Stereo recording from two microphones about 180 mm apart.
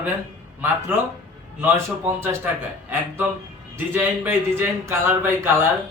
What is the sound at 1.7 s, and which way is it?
Speech, 15° right (ahead or behind).